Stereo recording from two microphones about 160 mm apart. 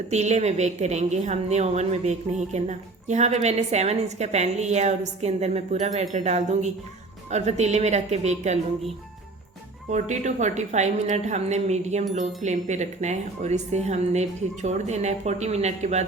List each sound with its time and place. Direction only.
0.1 s a woman's voice: 45° right (ahead or behind)
9.9 s a woman's voice: 50° right (ahead or behind)